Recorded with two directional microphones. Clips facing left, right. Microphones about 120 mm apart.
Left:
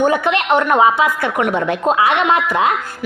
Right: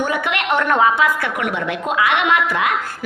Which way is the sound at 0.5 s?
20° left (ahead or behind).